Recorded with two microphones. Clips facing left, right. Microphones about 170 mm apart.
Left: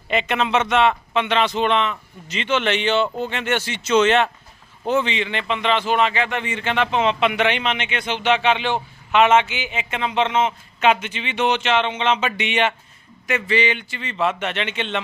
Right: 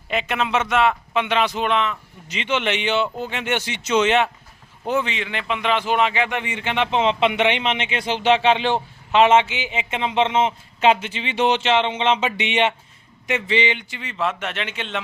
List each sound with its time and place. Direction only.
0.1 s a man's voice: 5° right (ahead or behind)
2.3 s speech: 15° right (ahead or behind)
14.2 s a man's voice: centre (ahead or behind)